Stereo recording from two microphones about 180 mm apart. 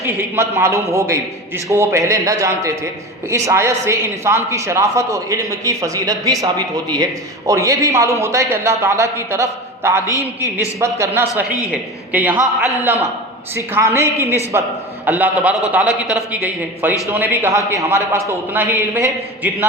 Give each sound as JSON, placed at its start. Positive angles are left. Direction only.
{"t": 0.0, "sound": "a man's voice", "side_deg": -15}
{"t": 10.1, "sound": "a man's voice", "side_deg": 20}
{"t": 10.8, "sound": "a man's voice", "side_deg": -15}
{"t": 13.6, "sound": "a man's voice", "side_deg": -15}